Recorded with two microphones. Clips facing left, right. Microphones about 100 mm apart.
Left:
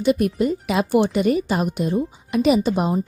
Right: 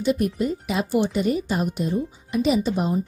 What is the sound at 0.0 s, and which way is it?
A woman's voice, 75° left (ahead or behind).